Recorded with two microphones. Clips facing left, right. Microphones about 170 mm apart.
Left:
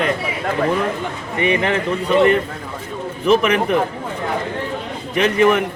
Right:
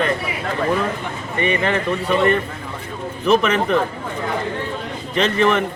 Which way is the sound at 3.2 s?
15° left (ahead or behind).